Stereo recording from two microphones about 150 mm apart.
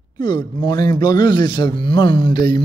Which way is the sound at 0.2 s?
30° left (ahead or behind).